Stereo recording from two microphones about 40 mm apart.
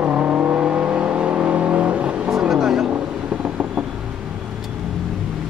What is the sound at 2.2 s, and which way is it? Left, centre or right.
Vehicle, centre.